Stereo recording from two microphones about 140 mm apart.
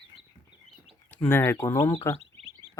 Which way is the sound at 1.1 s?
15° left (ahead or behind).